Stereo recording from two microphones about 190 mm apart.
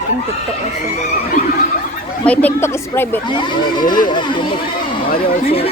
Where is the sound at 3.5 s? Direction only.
25° left (ahead or behind).